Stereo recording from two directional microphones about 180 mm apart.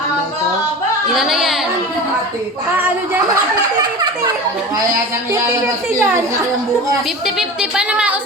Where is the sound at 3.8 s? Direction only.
20° right (ahead or behind).